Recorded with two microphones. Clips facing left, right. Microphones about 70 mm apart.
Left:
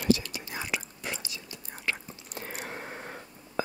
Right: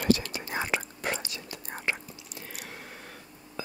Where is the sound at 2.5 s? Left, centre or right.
Left.